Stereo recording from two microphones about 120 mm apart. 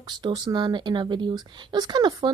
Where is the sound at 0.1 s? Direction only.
40° right (ahead or behind).